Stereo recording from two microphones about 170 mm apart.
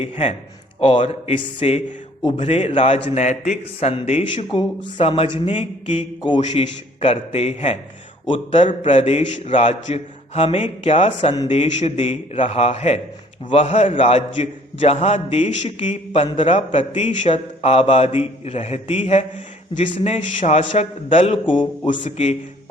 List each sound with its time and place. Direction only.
0.0 s a man's voice: 35° left (ahead or behind)
16.2 s a man's voice: 30° left (ahead or behind)
17.1 s a man's voice: 45° left (ahead or behind); by 21.9 s 30° left (ahead or behind)
21.9 s speech: 45° left (ahead or behind)